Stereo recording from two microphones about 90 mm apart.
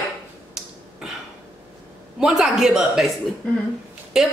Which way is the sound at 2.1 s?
5° right (ahead or behind).